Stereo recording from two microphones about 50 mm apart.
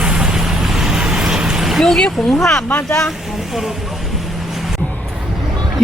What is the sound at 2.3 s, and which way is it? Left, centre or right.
Speech, centre.